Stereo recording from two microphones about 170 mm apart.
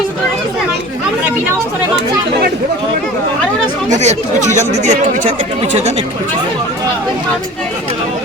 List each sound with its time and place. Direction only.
3.8 s speech: 40° right (ahead or behind)